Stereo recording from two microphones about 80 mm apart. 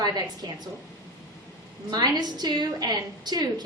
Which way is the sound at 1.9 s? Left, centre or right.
Right.